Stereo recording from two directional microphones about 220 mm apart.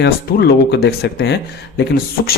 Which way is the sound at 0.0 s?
50° left (ahead or behind).